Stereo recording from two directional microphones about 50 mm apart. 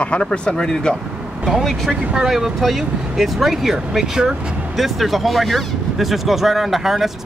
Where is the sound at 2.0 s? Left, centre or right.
Centre.